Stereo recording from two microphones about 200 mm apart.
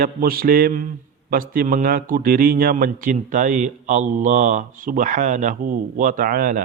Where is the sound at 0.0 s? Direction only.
45° right (ahead or behind).